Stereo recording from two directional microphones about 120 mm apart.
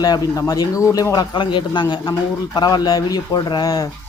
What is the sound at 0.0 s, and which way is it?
A man's voice, 30° left (ahead or behind).